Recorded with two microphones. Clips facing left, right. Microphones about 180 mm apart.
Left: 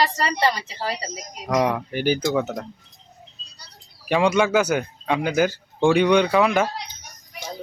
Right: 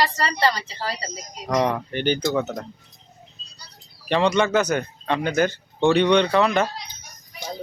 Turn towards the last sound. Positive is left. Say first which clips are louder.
# left 1 dB
turn(degrees=10)  # may be behind; listen again after turning